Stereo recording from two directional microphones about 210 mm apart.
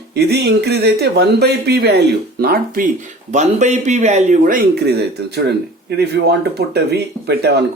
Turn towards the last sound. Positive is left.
turn(degrees=-50)  # may be behind; listen again after turning